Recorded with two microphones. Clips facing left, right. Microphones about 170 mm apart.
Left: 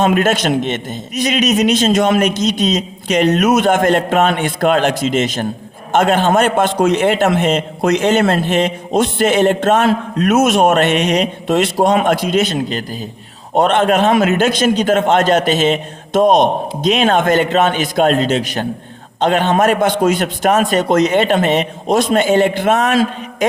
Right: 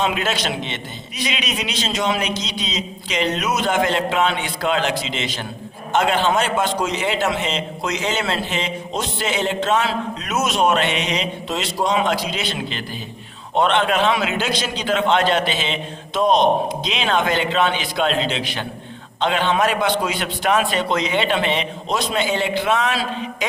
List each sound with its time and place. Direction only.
0.0 s a man's voice: 50° left (ahead or behind)